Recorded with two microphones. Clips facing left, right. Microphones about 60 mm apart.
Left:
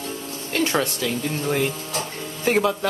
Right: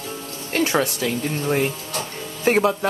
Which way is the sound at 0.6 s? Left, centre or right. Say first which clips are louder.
Right 2 dB; centre.